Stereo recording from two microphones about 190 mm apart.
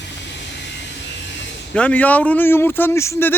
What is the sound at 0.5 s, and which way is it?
Vehicle, 65° left (ahead or behind).